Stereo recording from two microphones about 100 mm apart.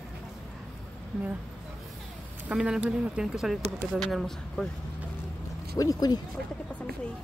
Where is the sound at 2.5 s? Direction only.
5° right (ahead or behind).